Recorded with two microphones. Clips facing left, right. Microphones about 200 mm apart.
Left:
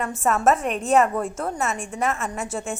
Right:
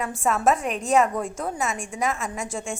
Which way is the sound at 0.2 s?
Centre (ahead or behind).